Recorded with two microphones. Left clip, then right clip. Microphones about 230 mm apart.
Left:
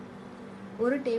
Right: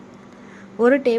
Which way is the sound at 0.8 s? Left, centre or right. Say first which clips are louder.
Right 12 dB; right.